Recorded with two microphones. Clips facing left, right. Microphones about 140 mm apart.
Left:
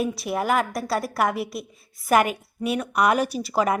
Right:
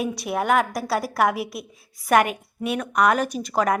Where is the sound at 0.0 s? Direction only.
Centre (ahead or behind).